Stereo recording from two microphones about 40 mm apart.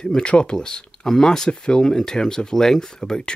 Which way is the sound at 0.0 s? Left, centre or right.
Left.